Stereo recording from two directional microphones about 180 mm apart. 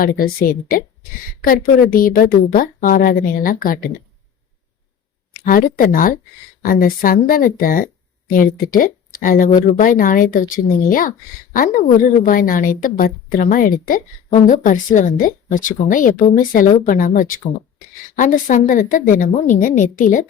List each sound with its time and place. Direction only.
0.0 s speech: 55° left (ahead or behind)
5.3 s speech: 50° left (ahead or behind)